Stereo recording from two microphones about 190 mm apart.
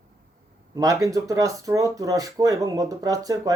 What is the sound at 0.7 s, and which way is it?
Speech, 20° right (ahead or behind).